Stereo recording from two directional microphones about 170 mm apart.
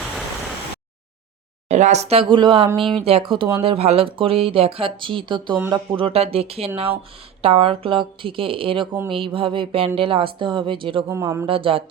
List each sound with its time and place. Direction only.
1.6 s speech: 40° right (ahead or behind)
2.7 s speech: centre (ahead or behind)
3.0 s speech: 35° right (ahead or behind)
11.1 s speech: 15° right (ahead or behind)
11.4 s speech: 30° right (ahead or behind)